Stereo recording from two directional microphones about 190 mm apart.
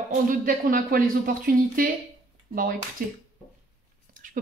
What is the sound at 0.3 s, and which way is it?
Speech, 45° right (ahead or behind).